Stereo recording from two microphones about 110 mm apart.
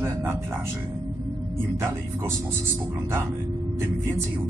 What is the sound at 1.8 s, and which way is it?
Speech, 25° right (ahead or behind).